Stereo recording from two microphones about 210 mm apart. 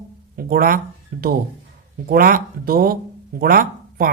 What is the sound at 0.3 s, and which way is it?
Speech, 45° right (ahead or behind).